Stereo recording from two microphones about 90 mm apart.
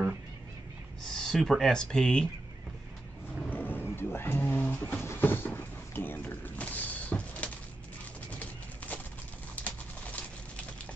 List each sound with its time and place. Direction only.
1.1 s speech: 5° left (ahead or behind)
3.4 s vehicle: 20° left (ahead or behind)
3.9 s a sound: 25° left (ahead or behind)
5.0 s creak: 25° left (ahead or behind)
8.4 s a sound: 15° left (ahead or behind)
9.6 s pigeon: 15° left (ahead or behind)